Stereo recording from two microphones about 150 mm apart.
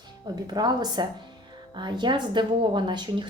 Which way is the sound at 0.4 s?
30° right (ahead or behind).